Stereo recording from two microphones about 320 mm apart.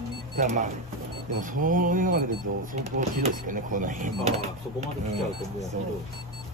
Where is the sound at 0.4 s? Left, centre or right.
Right.